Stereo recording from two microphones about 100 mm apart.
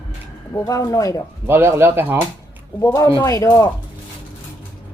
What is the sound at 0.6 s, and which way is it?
Speech, 35° left (ahead or behind).